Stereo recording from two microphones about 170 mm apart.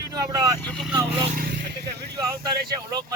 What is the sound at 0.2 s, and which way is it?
Speech, 20° right (ahead or behind).